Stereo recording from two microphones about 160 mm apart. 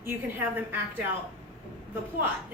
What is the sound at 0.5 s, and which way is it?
Speech, 10° right (ahead or behind).